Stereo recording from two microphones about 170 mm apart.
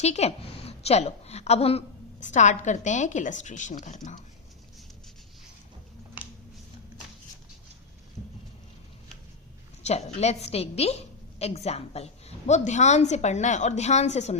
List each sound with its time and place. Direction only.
0.0 s a woman's voice: 40° left (ahead or behind)
9.8 s a woman's voice: 40° left (ahead or behind)